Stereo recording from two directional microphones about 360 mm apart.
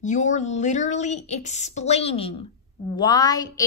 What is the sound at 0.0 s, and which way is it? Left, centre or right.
A woman's voice, centre.